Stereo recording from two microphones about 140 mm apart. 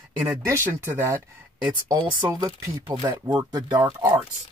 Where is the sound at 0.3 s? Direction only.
15° right (ahead or behind).